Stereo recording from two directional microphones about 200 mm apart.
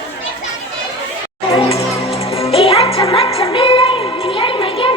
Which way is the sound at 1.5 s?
30° left (ahead or behind).